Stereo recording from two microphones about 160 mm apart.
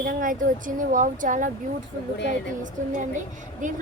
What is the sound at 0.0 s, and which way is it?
A woman's voice, 55° right (ahead or behind).